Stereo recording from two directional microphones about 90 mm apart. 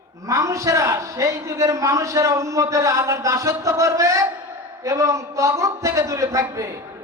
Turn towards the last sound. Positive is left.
turn(degrees=-35)  # may be behind; listen again after turning